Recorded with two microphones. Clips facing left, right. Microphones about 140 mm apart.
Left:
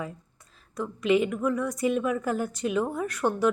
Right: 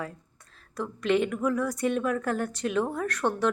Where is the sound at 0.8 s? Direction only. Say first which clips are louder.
Left 2 dB; centre (ahead or behind).